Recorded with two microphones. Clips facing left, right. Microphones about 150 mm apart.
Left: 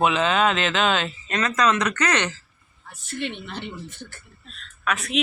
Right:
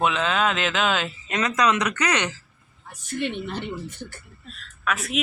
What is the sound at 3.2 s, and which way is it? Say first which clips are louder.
Speech: right 3 dB; 50° right (ahead or behind).